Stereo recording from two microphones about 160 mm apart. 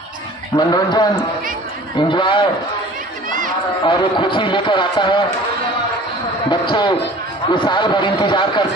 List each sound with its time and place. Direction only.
0.5 s a man's voice: 25° left (ahead or behind)
3.2 s a sound: 55° right (ahead or behind)
3.8 s a man's voice: 30° left (ahead or behind)
6.5 s a man's voice: 30° left (ahead or behind)